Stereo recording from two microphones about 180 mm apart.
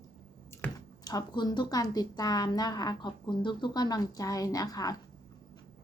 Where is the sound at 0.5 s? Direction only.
15° left (ahead or behind).